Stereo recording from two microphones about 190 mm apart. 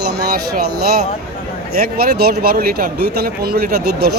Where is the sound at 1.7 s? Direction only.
55° right (ahead or behind).